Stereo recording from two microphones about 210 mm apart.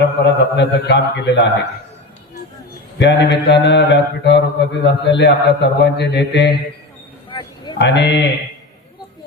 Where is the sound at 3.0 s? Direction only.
55° left (ahead or behind).